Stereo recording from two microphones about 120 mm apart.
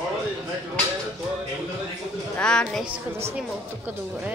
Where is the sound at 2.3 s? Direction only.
10° left (ahead or behind).